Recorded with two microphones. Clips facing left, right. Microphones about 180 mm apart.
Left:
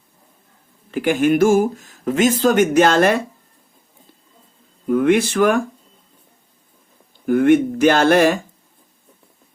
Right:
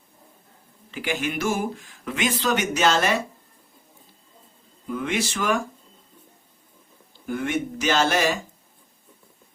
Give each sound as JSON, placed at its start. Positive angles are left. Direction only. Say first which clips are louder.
{"t": 0.9, "sound": "speech", "louder": "left 12 dB", "side_deg": 50}
{"t": 4.9, "sound": "speech", "louder": "left 11 dB", "side_deg": 55}
{"t": 7.3, "sound": "speech", "louder": "left 13 dB", "side_deg": 55}